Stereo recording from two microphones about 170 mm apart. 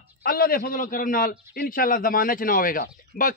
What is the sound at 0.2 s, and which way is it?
A man's voice, 60° left (ahead or behind).